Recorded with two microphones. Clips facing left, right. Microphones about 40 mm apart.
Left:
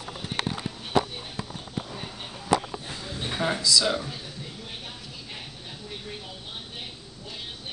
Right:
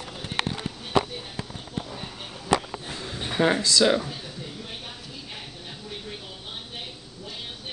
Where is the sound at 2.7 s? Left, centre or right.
Right.